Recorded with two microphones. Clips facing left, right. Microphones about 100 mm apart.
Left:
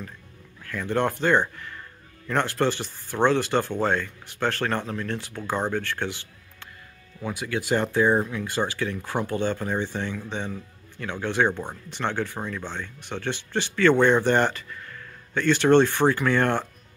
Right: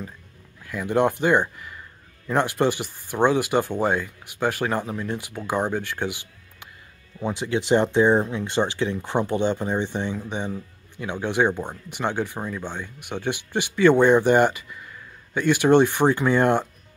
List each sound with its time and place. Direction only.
0.7 s speech: 15° right (ahead or behind)